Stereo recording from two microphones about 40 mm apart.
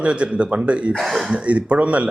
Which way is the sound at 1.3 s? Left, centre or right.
Right.